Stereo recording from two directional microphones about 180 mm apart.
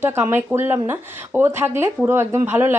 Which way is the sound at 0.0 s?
15° right (ahead or behind).